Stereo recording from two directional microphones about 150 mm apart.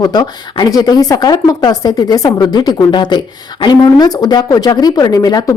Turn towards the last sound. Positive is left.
turn(degrees=25)  # may be behind; listen again after turning